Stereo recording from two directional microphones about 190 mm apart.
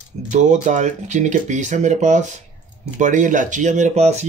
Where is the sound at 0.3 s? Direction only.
40° right (ahead or behind).